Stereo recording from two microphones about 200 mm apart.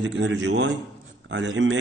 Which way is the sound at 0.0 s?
65° right (ahead or behind).